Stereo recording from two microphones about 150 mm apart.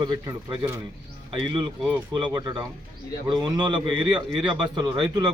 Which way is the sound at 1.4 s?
30° right (ahead or behind).